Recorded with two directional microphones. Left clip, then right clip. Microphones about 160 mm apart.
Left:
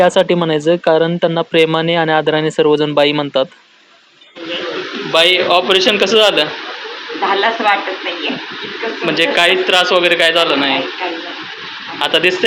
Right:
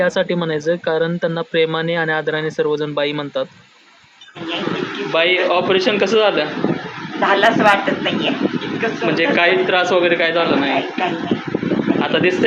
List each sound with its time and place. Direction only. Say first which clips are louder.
0.0 s speech: left 6 dB; 20° left (ahead or behind)
5.1 s a man's voice: left 4 dB; centre (ahead or behind)
7.4 s speech: right 2 dB; 15° right (ahead or behind)
9.1 s a man's voice: left 3 dB; 5° right (ahead or behind)
11.9 s speech: left 6 dB; centre (ahead or behind)